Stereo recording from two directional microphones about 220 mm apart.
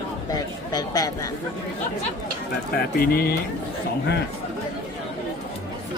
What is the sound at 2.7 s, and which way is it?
Speech, 45° left (ahead or behind).